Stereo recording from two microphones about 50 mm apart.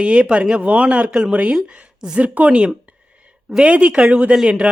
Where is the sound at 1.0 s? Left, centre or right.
Centre.